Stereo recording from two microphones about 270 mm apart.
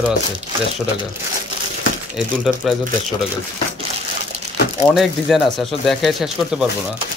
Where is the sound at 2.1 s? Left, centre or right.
Centre.